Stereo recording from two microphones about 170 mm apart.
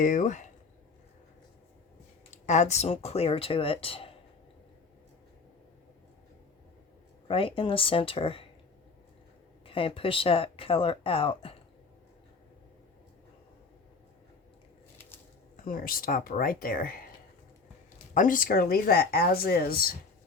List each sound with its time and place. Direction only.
0.0 s speech: 45° left (ahead or behind)
2.3 s speech: 45° left (ahead or behind)
7.3 s speech: 30° left (ahead or behind)
9.6 s speech: 30° left (ahead or behind)
15.5 s speech: 55° left (ahead or behind)
18.1 s speech: 50° left (ahead or behind)